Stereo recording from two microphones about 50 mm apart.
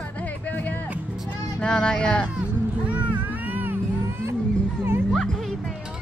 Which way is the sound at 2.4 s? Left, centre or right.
Right.